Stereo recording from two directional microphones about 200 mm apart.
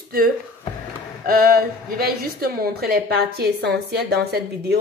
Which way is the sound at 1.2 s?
45° right (ahead or behind).